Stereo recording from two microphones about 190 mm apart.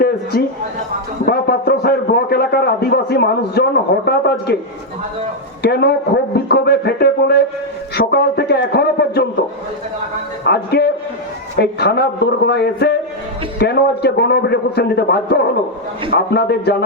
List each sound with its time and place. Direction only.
0.0 s a man's voice: 55° left (ahead or behind)
5.6 s a man's voice: 60° left (ahead or behind)
10.4 s a man's voice: 60° left (ahead or behind)